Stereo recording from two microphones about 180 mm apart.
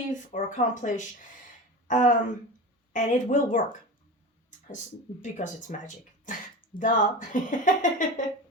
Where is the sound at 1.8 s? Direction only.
45° left (ahead or behind).